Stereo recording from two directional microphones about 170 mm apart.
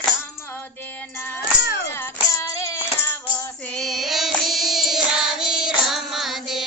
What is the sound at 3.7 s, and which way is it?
Music, centre (ahead or behind).